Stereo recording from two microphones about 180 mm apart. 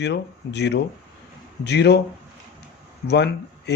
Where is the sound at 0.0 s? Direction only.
70° left (ahead or behind).